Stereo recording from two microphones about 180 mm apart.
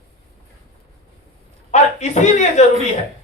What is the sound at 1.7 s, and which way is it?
Speech, 40° left (ahead or behind).